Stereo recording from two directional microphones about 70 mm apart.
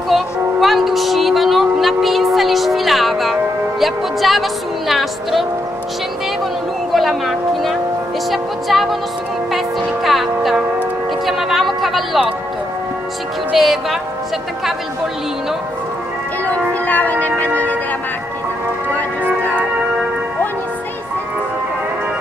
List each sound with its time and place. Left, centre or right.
0.1 s music: centre
3.8 s a woman's voice: centre
6.9 s a woman's voice: centre
10.0 s a woman's voice: centre
13.6 s a woman's voice: centre
16.8 s speech: left